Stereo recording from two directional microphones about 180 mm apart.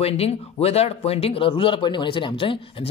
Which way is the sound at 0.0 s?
35° left (ahead or behind).